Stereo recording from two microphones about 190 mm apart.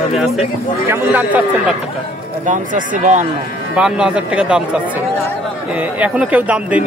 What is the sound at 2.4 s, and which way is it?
Speech, 45° right (ahead or behind).